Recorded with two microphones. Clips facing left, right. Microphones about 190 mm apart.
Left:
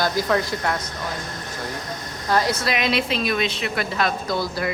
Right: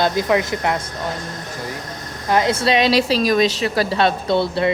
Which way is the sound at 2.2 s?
20° right (ahead or behind).